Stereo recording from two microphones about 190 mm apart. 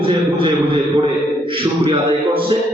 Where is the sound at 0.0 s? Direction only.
25° right (ahead or behind).